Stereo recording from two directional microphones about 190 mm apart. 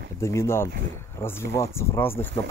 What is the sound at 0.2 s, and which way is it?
Speech, 15° left (ahead or behind).